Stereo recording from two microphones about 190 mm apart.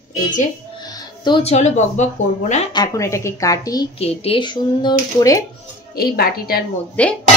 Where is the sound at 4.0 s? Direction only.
30° left (ahead or behind).